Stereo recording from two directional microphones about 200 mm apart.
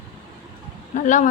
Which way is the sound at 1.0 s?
40° left (ahead or behind).